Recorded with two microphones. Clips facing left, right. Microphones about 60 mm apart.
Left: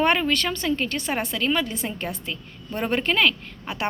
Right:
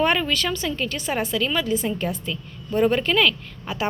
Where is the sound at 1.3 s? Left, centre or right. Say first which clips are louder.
Right 2 dB; left.